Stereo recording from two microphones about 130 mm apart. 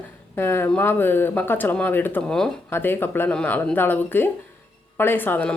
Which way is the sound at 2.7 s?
15° left (ahead or behind).